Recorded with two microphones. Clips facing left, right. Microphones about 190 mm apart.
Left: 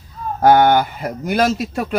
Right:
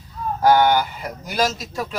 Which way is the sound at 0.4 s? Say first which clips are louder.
Left 4 dB; 55° left (ahead or behind).